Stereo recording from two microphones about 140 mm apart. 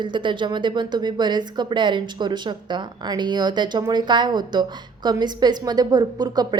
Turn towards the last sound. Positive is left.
turn(degrees=-30)  # may be behind; listen again after turning